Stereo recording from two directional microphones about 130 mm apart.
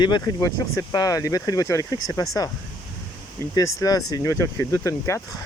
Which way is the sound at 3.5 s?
25° left (ahead or behind).